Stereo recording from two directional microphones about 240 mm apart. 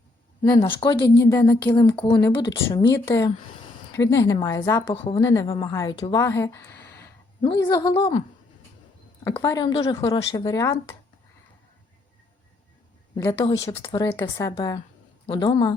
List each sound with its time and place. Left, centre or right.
0.4 s a woman's voice: centre
3.9 s a woman's voice: centre
9.2 s a woman's voice: centre
13.1 s a woman's voice: centre